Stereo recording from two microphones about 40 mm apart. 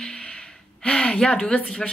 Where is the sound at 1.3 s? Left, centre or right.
Left.